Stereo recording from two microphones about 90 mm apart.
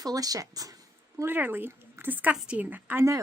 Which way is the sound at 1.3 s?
20° right (ahead or behind).